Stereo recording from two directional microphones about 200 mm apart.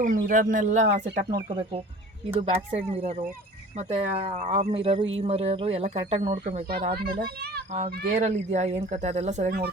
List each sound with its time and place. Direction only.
0.0 s speech: 40° right (ahead or behind)
1.0 s a child's voice: 55° right (ahead or behind)
1.5 s speech: 25° right (ahead or behind)
6.9 s a child's voice: 50° right (ahead or behind)
8.1 s speech: 35° right (ahead or behind)